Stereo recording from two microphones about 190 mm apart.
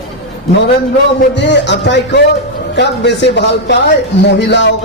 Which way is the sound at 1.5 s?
65° left (ahead or behind).